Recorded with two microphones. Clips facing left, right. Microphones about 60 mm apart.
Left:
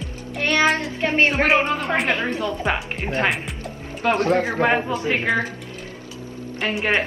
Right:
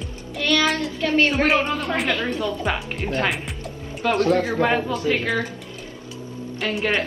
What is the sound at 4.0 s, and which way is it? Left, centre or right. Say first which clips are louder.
Speech: even; left.